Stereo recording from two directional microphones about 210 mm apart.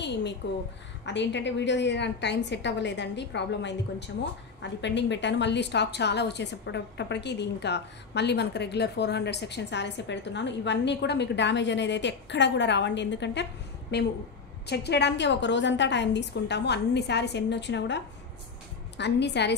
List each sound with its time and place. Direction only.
0.0 s a woman's voice: 55° left (ahead or behind)